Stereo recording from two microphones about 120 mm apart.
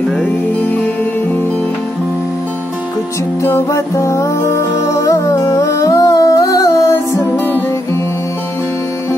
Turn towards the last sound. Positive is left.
turn(degrees=15)  # may be behind; listen again after turning